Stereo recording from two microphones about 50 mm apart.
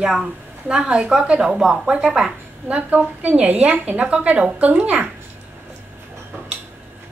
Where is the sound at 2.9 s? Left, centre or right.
Right.